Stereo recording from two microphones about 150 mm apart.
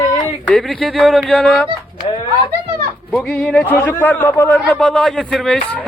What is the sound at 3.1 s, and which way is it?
A man's voice, 5° left (ahead or behind).